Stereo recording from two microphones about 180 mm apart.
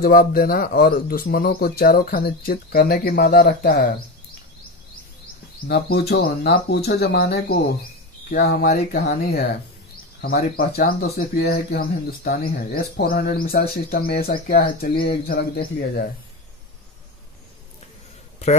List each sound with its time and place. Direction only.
0.0 s speech: 55° left (ahead or behind)
5.7 s speech: 60° left (ahead or behind)